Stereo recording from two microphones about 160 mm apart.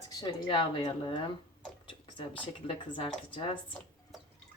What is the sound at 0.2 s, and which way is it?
Speech, 30° left (ahead or behind).